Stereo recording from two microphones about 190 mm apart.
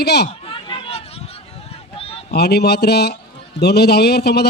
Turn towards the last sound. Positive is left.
turn(degrees=60)  # may be behind; listen again after turning